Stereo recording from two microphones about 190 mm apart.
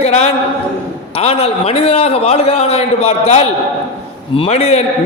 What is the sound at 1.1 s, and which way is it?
A man's voice, 30° left (ahead or behind).